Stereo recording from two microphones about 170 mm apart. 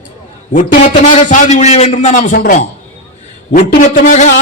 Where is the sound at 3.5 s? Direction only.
50° left (ahead or behind).